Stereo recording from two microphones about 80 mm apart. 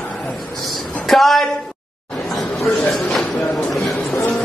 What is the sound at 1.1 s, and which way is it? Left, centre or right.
Speech, centre.